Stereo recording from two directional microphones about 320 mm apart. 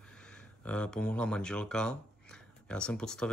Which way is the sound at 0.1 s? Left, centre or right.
Centre.